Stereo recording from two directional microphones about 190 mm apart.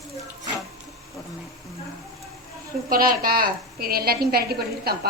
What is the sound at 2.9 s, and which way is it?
A woman's voice, 50° right (ahead or behind).